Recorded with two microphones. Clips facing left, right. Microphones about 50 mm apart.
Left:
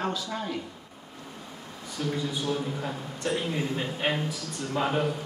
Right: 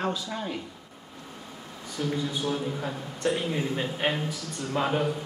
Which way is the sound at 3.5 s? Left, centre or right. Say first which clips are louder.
Right 1 dB; centre.